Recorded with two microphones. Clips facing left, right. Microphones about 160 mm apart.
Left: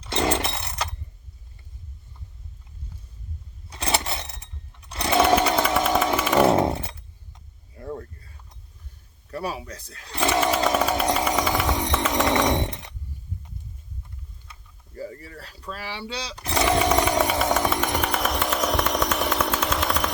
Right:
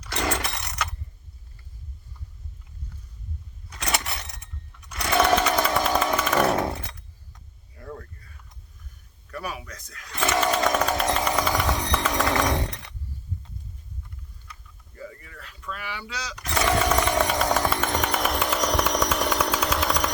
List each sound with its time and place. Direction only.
0.0 s chainsaw: 25° left (ahead or behind)
3.7 s a sound: 30° left (ahead or behind)
5.1 s sewing machine: 10° left (ahead or behind)
5.6 s chainsaw: 5° left (ahead or behind)
6.4 s chainsaw: 25° left (ahead or behind)
9.2 s speech: 30° left (ahead or behind)
10.4 s a sound: 10° left (ahead or behind)
11.7 s music: 20° left (ahead or behind)
14.9 s a sound: 35° left (ahead or behind)
16.6 s a sound: 15° left (ahead or behind)
17.1 s music: 10° left (ahead or behind)
17.8 s chainsaw: 5° left (ahead or behind)